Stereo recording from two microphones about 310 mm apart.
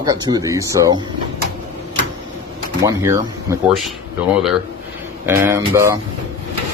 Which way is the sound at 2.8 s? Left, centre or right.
Centre.